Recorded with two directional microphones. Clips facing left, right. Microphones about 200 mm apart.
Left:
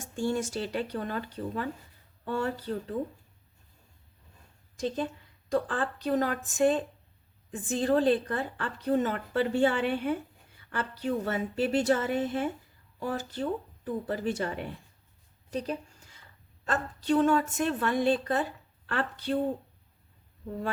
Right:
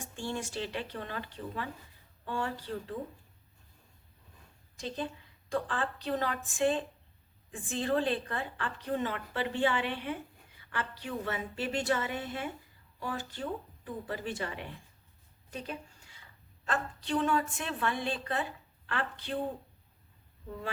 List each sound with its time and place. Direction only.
0.0 s a woman's voice: 45° left (ahead or behind)
5.5 s a woman's voice: 40° left (ahead or behind)
15.4 s a sound: 40° left (ahead or behind)
16.6 s a woman's voice: 40° left (ahead or behind)